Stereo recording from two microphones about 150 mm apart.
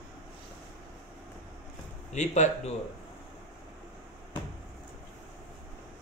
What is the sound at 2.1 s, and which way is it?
Speech, 50° left (ahead or behind).